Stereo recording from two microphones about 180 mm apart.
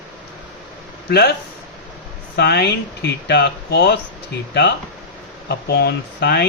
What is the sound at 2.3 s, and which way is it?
Speech, 65° left (ahead or behind).